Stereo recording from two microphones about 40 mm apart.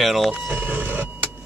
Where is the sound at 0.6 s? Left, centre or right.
Right.